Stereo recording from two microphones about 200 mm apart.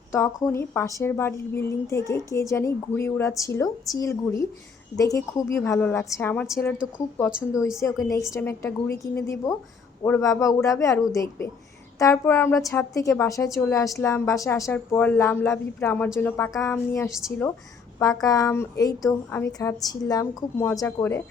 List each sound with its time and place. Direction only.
0.4 s a woman's voice: 10° left (ahead or behind)
7.3 s a woman's voice: 5° right (ahead or behind)
7.8 s a woman's voice: 15° left (ahead or behind)